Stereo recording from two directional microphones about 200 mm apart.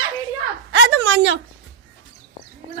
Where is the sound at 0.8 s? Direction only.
65° right (ahead or behind).